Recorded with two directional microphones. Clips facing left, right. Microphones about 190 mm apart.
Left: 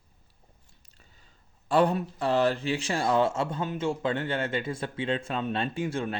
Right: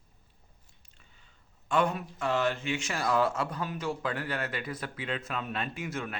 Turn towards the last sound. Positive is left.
turn(degrees=30)  # may be behind; listen again after turning